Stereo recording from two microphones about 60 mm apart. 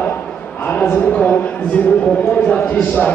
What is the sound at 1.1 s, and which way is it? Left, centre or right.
Speech, left.